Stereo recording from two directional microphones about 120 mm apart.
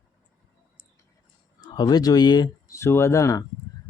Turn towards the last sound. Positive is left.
turn(degrees=25)  # may be behind; listen again after turning